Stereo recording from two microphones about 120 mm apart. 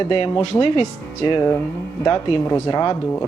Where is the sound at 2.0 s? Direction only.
30° left (ahead or behind).